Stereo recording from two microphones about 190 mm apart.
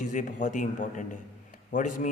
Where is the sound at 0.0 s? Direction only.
40° left (ahead or behind).